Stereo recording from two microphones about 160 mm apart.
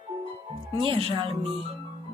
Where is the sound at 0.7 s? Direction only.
35° right (ahead or behind).